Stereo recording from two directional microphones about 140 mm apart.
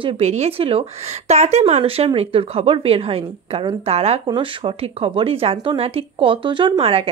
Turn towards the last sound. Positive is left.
turn(degrees=-45)  # may be behind; listen again after turning